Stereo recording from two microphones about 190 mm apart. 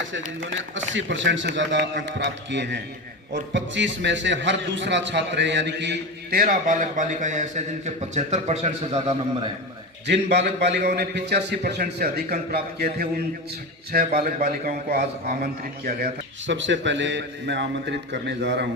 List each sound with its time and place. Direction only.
0.8 s a man's voice: 75° right (ahead or behind)
6.4 s a man's voice: 45° right (ahead or behind)
10.1 s a man's voice: 60° right (ahead or behind)
16.5 s a man's voice: 75° right (ahead or behind)